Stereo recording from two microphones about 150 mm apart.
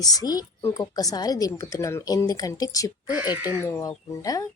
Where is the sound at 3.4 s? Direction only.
10° right (ahead or behind).